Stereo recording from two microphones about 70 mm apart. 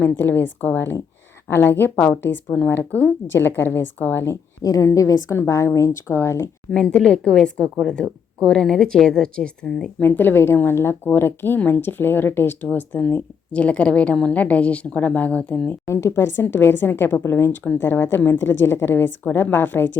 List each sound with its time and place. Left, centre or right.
0.0 s a woman's voice: left
4.6 s speech: left
6.7 s a woman's voice: centre
10.0 s a woman's voice: left
15.9 s a woman's voice: left